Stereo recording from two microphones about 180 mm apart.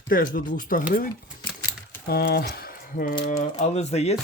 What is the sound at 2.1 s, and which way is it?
Speech, 60° left (ahead or behind).